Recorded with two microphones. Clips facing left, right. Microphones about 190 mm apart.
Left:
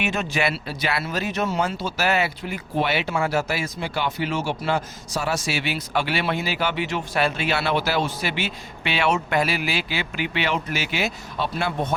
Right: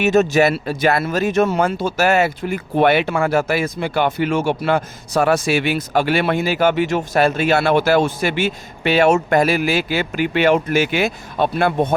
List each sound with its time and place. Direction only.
0.0 s speech: 45° right (ahead or behind)